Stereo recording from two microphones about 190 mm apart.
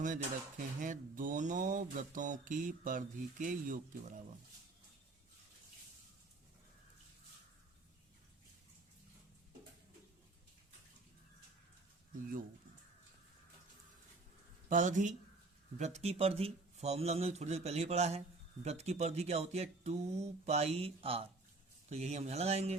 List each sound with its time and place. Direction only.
0.0 s speech: 40° right (ahead or behind)
14.7 s speech: 40° right (ahead or behind)